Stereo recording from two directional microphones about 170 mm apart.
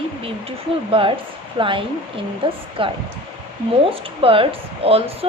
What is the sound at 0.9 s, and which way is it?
A woman's voice, 30° right (ahead or behind).